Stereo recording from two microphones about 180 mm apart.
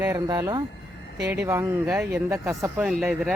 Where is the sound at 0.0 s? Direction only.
15° right (ahead or behind).